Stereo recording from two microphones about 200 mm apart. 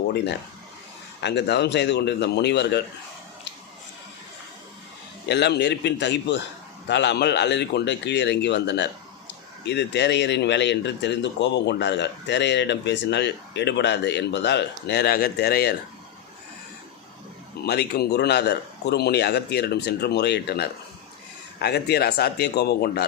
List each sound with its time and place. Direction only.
1.2 s a man's voice: 60° left (ahead or behind)
5.3 s a man's voice: 55° left (ahead or behind)
17.7 s a man's voice: 55° left (ahead or behind)